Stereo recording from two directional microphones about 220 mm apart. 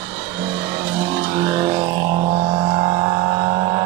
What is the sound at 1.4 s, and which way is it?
Vehicle, 20° right (ahead or behind).